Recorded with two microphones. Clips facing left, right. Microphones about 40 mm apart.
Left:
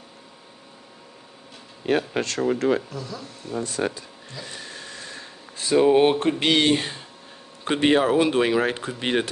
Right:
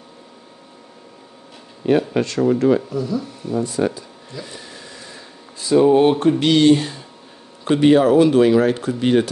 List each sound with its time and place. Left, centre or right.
1.9 s speech: left
2.9 s speech: centre
3.6 s speech: left
4.5 s a sound: left
5.8 s speech: centre